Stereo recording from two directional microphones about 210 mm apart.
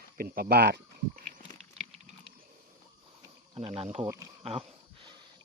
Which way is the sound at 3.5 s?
25° right (ahead or behind).